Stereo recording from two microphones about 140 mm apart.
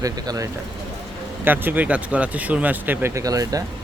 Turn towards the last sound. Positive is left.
turn(degrees=-25)  # may be behind; listen again after turning